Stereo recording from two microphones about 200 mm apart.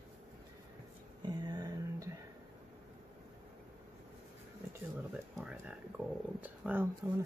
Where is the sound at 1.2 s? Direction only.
20° right (ahead or behind).